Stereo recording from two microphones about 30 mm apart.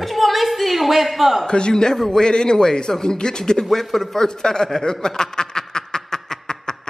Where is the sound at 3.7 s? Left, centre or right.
Centre.